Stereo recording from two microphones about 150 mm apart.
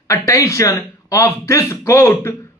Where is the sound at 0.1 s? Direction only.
20° left (ahead or behind).